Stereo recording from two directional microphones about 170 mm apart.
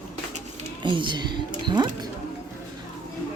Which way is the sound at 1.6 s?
25° right (ahead or behind).